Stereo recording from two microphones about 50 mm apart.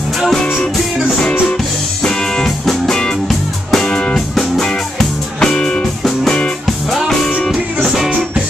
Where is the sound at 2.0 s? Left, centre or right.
Centre.